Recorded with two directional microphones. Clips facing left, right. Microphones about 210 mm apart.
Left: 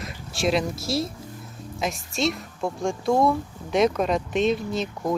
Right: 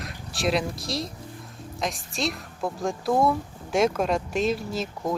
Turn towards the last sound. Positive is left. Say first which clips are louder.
# left 2 dB
turn(degrees=0)  # may be behind; listen again after turning